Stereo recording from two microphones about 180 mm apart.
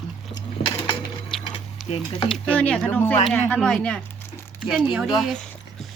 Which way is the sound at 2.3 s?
10° left (ahead or behind).